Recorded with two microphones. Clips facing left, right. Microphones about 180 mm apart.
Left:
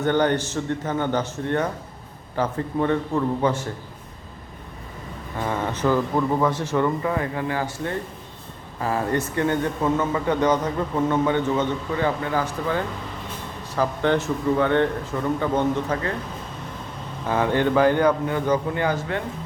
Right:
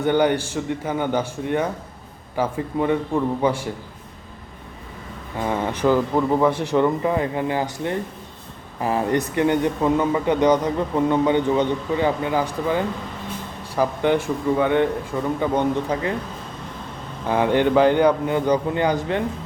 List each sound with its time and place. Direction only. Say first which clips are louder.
0.0 s speech: right 2 dB; 10° right (ahead or behind)
5.4 s speech: right 3 dB; 15° right (ahead or behind)
17.2 s speech: right 3 dB; 15° right (ahead or behind)